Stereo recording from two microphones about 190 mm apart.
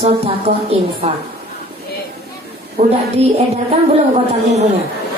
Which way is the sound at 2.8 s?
50° right (ahead or behind).